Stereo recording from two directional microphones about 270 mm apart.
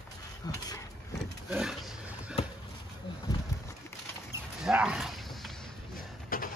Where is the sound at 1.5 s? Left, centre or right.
Centre.